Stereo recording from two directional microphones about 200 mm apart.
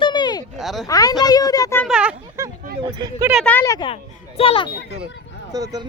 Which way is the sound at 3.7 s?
25° left (ahead or behind).